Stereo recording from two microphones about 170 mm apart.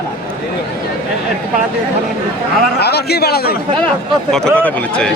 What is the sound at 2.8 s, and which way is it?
Speech, 70° left (ahead or behind).